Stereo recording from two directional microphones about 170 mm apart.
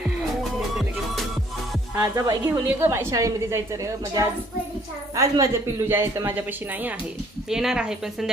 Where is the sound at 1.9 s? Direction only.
20° right (ahead or behind).